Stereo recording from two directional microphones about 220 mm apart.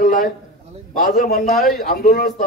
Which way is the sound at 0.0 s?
35° left (ahead or behind).